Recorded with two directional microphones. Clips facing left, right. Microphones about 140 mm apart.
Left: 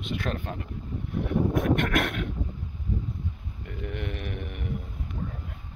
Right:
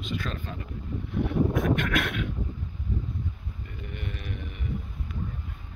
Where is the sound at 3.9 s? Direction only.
75° left (ahead or behind); by 4.6 s 60° left (ahead or behind).